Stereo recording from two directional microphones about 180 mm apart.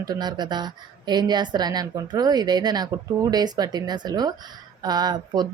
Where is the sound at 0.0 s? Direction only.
20° right (ahead or behind).